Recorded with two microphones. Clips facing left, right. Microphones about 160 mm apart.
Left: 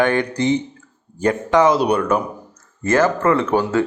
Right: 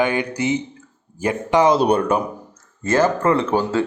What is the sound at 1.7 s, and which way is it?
Speech, 25° right (ahead or behind).